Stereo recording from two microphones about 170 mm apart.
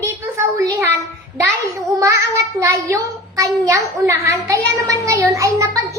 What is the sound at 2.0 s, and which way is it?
Child singing, 20° right (ahead or behind).